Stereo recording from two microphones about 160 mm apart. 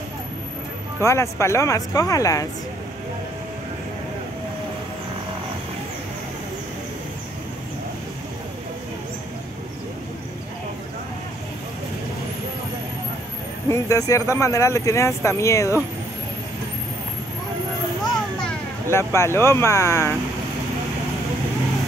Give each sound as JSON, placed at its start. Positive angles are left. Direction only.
{"t": 1.0, "sound": "speech", "side_deg": 20}
{"t": 13.7, "sound": "speech", "side_deg": 20}
{"t": 18.0, "sound": "a sound", "side_deg": 5}
{"t": 18.9, "sound": "speech", "side_deg": 15}